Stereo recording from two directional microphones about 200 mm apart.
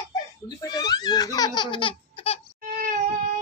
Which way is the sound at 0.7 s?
20° left (ahead or behind).